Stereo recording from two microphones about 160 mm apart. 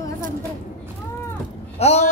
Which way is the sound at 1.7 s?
40° left (ahead or behind).